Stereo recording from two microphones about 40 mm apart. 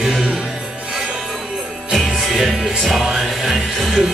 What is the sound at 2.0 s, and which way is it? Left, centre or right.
Music, centre.